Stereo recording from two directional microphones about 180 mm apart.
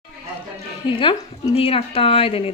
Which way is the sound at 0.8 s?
30° left (ahead or behind).